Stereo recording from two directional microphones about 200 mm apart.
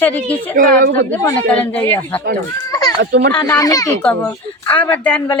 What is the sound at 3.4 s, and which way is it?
Speech, 15° left (ahead or behind).